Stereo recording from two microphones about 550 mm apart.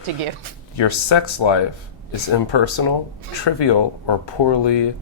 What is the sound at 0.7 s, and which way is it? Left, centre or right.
Speech, left.